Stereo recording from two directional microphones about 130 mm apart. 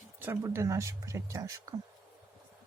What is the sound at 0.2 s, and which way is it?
Speech, 20° right (ahead or behind).